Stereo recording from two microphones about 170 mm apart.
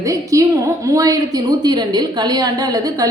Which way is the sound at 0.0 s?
20° right (ahead or behind).